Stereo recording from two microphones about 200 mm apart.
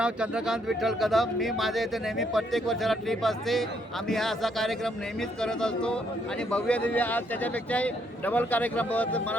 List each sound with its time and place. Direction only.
0.0 s a man's voice: 5° right (ahead or behind)